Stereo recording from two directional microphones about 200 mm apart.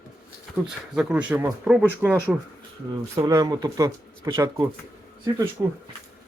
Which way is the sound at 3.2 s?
20° right (ahead or behind).